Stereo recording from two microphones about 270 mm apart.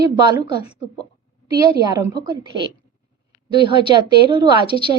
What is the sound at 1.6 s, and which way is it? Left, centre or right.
A woman's voice, centre.